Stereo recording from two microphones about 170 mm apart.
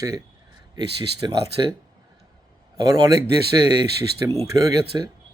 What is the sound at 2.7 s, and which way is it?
Speech, 20° right (ahead or behind).